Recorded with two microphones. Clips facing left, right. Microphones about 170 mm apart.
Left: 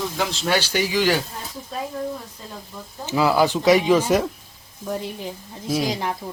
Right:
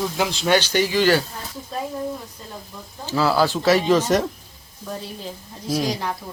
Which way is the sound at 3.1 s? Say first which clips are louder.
Left 1 dB; 15° left (ahead or behind).